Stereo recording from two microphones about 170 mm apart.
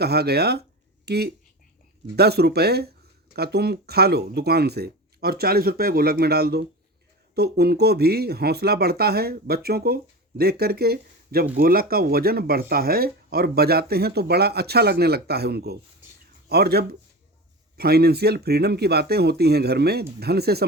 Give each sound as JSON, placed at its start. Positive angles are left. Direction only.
{"t": 0.0, "sound": "speech", "side_deg": -70}